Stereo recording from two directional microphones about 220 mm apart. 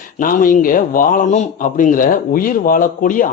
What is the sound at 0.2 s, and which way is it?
A man's voice, 40° left (ahead or behind).